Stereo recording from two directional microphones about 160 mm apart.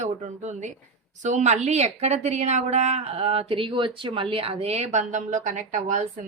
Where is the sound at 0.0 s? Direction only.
45° right (ahead or behind).